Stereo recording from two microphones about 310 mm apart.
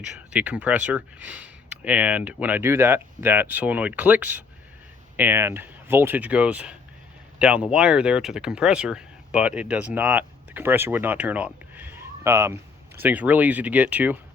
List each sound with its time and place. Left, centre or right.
0.0 s speech: centre